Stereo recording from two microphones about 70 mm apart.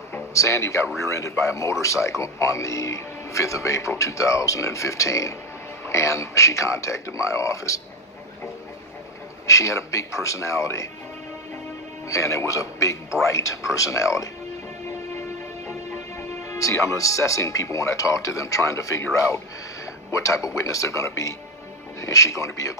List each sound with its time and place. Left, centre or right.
0.3 s speech: left
9.5 s speech: left
12.1 s speech: left
16.4 s speech: left